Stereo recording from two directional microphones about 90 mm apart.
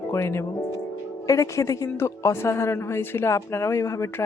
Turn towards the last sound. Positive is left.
turn(degrees=35)  # may be behind; listen again after turning